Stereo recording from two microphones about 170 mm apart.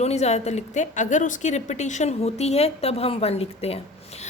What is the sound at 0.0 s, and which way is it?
A woman's voice, 40° left (ahead or behind).